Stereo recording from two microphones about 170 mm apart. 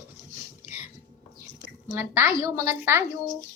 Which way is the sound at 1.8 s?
15° right (ahead or behind).